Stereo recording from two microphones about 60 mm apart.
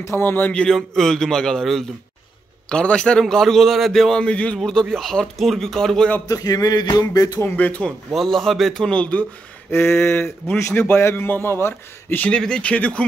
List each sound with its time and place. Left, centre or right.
0.2 s a man's voice: left
0.7 s a man's voice: centre
2.7 s a man's voice: centre
4.3 s speech: left
4.6 s a man's voice: centre
6.2 s music: left
7.3 s speech: left
8.1 s speech: centre
8.9 s speech: left
9.7 s a sound: left
10.7 s speech: centre
11.0 s a man's voice: left
12.2 s a man's voice: centre